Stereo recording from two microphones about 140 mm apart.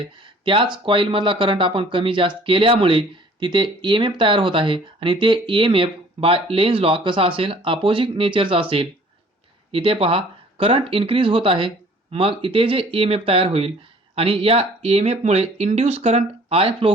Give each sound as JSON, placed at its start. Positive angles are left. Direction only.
{"t": 0.2, "sound": "speech", "side_deg": -35}